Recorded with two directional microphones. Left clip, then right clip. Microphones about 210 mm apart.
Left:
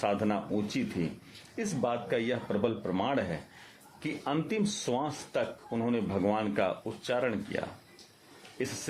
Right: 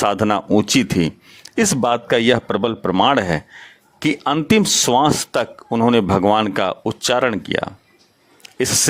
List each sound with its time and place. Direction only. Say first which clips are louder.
0.0 s speech: right 13 dB; 50° right (ahead or behind)